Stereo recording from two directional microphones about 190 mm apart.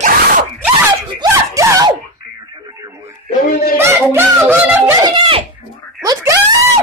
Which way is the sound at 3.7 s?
15° right (ahead or behind).